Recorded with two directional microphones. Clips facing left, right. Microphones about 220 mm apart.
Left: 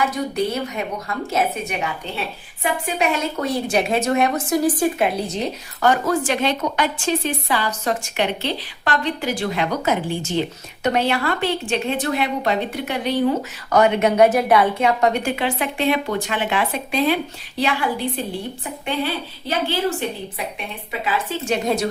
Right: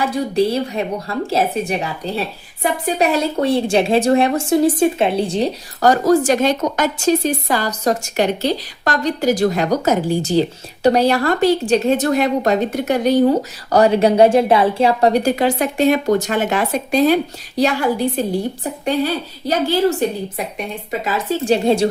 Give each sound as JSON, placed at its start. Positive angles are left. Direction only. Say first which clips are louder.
{"t": 0.0, "sound": "a woman's voice", "louder": "right 5 dB", "side_deg": -30}